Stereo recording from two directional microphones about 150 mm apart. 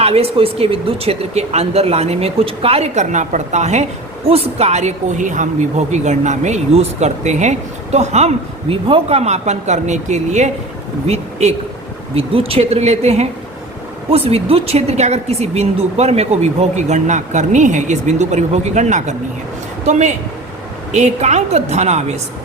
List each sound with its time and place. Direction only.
0.0 s a woman's voice: 40° right (ahead or behind)